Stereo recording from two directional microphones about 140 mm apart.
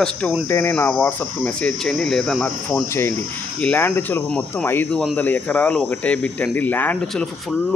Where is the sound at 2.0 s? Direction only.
Centre (ahead or behind).